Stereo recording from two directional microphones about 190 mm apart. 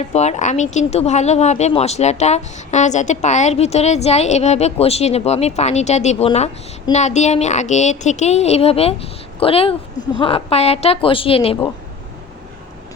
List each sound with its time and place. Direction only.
0.0 s speech: 35° left (ahead or behind)